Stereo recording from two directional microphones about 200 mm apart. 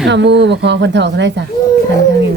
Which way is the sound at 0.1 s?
60° right (ahead or behind).